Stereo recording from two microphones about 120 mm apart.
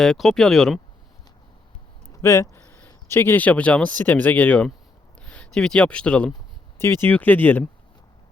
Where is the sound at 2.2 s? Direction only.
25° left (ahead or behind).